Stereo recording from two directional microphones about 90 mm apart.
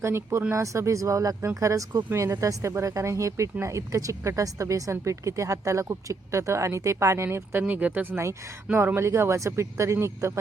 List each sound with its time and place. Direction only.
0.0 s speech: 30° right (ahead or behind)
7.7 s speech: 15° right (ahead or behind)